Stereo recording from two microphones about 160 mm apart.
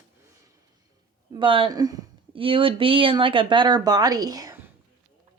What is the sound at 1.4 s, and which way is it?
Speech, 35° right (ahead or behind).